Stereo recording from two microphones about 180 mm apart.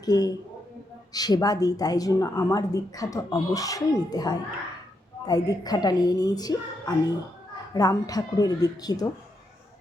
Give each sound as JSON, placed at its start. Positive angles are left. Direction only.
{"t": 0.0, "sound": "speech", "side_deg": 20}